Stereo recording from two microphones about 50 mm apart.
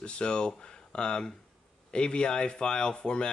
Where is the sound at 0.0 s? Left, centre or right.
Centre.